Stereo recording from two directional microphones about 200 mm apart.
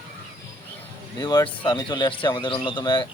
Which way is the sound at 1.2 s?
20° left (ahead or behind).